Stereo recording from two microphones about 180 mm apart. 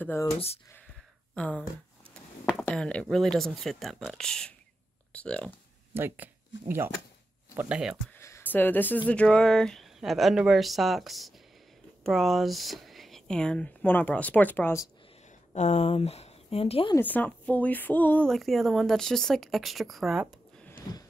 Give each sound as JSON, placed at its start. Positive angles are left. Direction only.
{"t": 0.0, "sound": "speech", "side_deg": 10}
{"t": 0.3, "sound": "speech", "side_deg": 35}
{"t": 1.3, "sound": "speech", "side_deg": 5}
{"t": 2.6, "sound": "speech", "side_deg": 5}
{"t": 5.9, "sound": "speech", "side_deg": -10}
{"t": 7.5, "sound": "speech", "side_deg": -5}
{"t": 8.2, "sound": "a sound", "side_deg": 15}
{"t": 9.1, "sound": "speech", "side_deg": 5}
{"t": 15.5, "sound": "speech", "side_deg": 40}
{"t": 16.9, "sound": "speech", "side_deg": 10}